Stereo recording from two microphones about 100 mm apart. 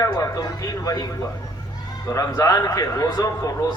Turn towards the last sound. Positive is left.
turn(degrees=35)  # may be behind; listen again after turning